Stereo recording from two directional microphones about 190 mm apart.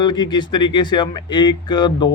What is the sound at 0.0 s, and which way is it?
Speech, 20° left (ahead or behind).